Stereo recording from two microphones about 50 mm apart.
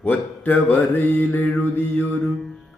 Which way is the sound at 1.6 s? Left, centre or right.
Left.